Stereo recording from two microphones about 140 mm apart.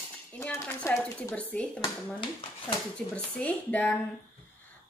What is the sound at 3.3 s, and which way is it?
Speech, 10° left (ahead or behind).